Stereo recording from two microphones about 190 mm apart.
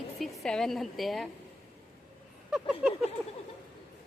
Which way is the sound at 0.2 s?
Centre (ahead or behind).